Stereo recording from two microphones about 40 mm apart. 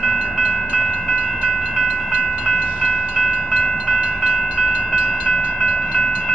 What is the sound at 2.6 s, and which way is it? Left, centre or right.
Train, right.